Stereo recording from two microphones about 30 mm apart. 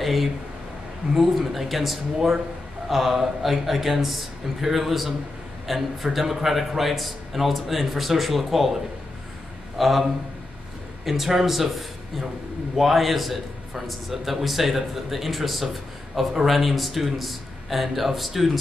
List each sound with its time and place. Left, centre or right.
0.0 s a man's voice: centre
2.1 s speech: centre
2.9 s a man's voice: centre
9.8 s a man's voice: centre
11.1 s speech: centre
12.7 s a man's voice: centre